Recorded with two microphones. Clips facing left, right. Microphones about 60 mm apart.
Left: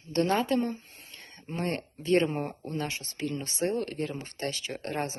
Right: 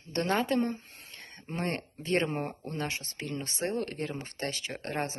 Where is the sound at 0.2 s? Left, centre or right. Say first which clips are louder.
Left 2 dB; right.